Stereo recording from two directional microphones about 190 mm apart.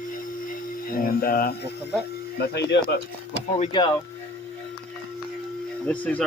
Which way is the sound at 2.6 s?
65° left (ahead or behind).